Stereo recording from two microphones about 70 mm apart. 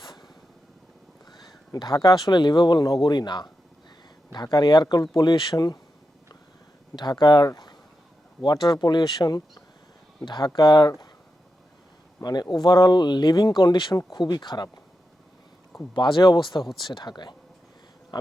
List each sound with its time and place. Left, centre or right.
0.0 s vehicle: left
1.5 s speech: left
4.3 s speech: left
6.9 s speech: left
10.2 s speech: left
12.2 s speech: left
16.0 s speech: left